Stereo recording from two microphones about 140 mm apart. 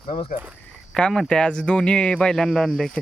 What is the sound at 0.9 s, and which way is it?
Speech, 5° left (ahead or behind).